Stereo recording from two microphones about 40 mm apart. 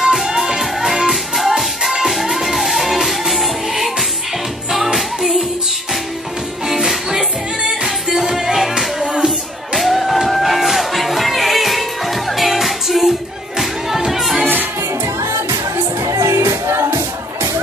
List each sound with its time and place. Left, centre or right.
0.0 s music: centre
6.7 s music: centre
9.8 s music: centre
14.4 s music: right
16.0 s music: right